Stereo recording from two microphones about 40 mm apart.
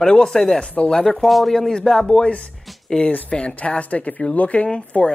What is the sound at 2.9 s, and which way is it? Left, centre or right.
Speech, centre.